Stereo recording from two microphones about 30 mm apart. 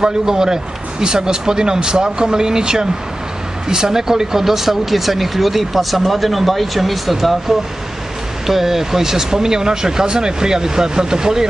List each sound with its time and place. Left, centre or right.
0.0 s speech: right